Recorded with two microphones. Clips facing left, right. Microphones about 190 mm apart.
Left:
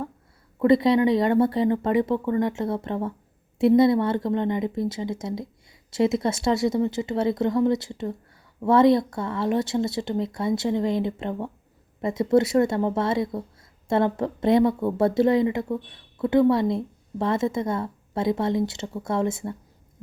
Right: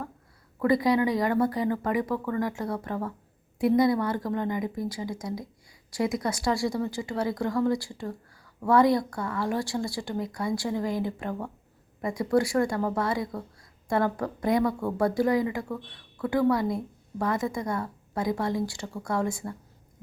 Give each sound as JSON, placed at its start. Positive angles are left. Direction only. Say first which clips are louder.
{"t": 0.6, "sound": "a woman's voice", "louder": "left 5 dB", "side_deg": 25}